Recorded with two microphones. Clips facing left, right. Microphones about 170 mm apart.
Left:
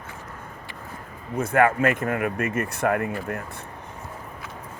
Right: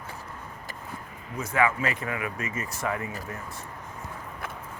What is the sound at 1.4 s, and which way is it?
Speech, 55° left (ahead or behind).